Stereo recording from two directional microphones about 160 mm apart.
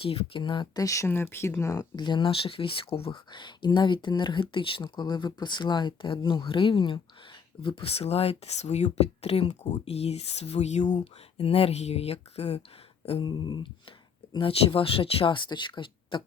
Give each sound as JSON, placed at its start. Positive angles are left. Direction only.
{"t": 0.0, "sound": "speech", "side_deg": 35}
{"t": 11.0, "sound": "speech", "side_deg": 35}